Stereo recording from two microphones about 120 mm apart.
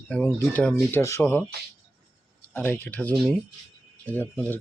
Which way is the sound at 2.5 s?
15° left (ahead or behind).